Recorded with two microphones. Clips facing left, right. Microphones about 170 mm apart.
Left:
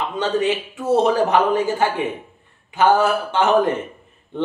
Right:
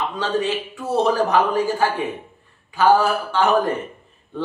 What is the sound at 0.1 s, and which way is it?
Speech, 20° left (ahead or behind).